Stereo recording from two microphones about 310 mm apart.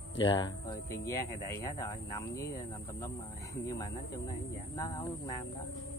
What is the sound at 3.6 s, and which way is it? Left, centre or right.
Speech, centre.